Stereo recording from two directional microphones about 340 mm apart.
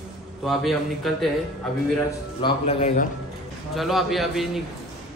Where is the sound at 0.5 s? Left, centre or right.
Centre.